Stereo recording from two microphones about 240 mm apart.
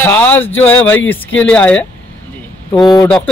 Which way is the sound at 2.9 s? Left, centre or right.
Centre.